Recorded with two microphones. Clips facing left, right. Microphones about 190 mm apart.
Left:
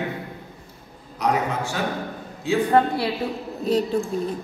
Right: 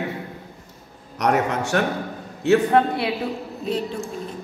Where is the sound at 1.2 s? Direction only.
70° right (ahead or behind).